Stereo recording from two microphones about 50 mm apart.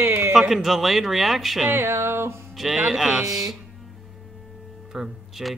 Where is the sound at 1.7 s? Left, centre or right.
Right.